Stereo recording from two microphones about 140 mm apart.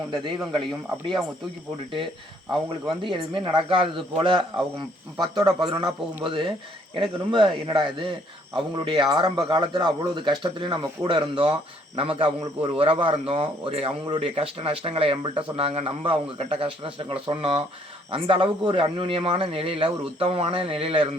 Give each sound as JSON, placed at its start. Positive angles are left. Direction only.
{"t": 0.1, "sound": "speech", "side_deg": -35}
{"t": 2.9, "sound": "speech", "side_deg": -35}